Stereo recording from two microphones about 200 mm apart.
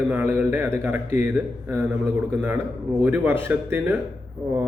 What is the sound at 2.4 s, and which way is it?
A man's voice, 10° right (ahead or behind).